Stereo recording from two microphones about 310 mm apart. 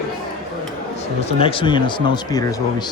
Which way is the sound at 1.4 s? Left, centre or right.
Centre.